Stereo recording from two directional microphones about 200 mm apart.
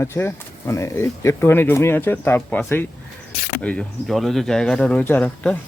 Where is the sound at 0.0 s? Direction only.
10° left (ahead or behind).